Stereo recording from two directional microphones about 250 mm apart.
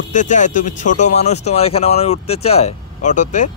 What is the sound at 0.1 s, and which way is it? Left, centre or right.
Speech, left.